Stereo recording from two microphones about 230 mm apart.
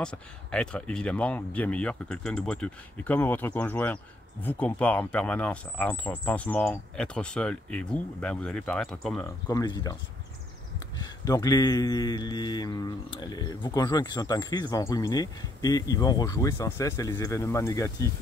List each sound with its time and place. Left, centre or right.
0.0 s speech: centre
9.5 s speech: centre
11.2 s speech: centre